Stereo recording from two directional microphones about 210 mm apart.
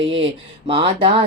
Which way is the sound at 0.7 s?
25° right (ahead or behind).